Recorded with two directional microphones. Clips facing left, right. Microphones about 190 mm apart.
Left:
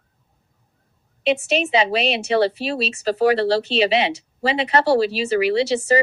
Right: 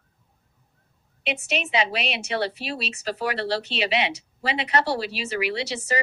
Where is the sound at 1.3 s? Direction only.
30° left (ahead or behind).